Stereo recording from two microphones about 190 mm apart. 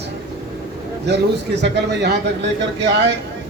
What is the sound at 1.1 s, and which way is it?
Speech, 65° right (ahead or behind).